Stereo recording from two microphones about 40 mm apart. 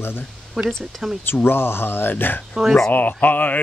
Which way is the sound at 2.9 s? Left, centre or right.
Left.